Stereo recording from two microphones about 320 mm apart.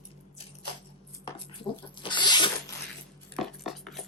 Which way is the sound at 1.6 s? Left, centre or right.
Centre.